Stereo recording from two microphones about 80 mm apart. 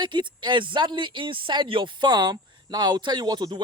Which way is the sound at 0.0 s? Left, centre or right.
Right.